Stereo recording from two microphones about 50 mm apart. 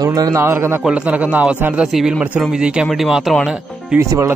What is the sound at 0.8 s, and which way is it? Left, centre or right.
Speech, right.